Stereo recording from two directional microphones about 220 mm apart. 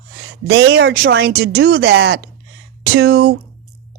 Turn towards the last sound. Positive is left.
turn(degrees=-45)  # may be behind; listen again after turning